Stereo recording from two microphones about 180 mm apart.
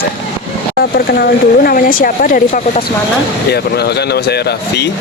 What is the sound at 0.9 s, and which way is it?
Speech, 55° left (ahead or behind).